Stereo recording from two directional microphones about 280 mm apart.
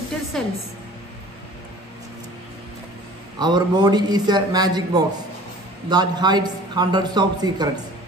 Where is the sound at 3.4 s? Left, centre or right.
Centre.